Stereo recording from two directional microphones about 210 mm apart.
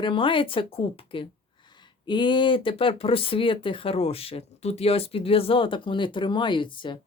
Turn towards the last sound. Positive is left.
turn(degrees=25)  # may be behind; listen again after turning